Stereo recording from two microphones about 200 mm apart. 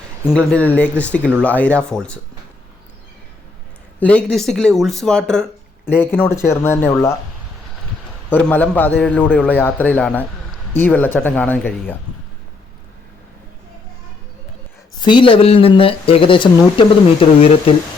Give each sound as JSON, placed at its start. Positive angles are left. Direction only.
{"t": 0.3, "sound": "a man's voice", "side_deg": 5}
{"t": 4.0, "sound": "a man's voice", "side_deg": 5}
{"t": 8.3, "sound": "a man's voice", "side_deg": 10}
{"t": 14.9, "sound": "speech", "side_deg": 20}